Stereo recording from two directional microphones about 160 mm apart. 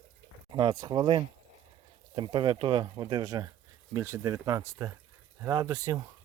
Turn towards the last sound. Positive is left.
turn(degrees=-20)  # may be behind; listen again after turning